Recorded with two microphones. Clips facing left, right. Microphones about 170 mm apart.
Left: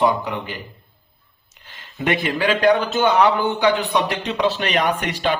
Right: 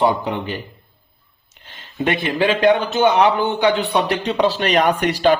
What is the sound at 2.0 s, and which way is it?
Speech, 30° right (ahead or behind).